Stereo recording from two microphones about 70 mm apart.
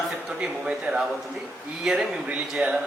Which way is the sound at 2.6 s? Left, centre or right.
Centre.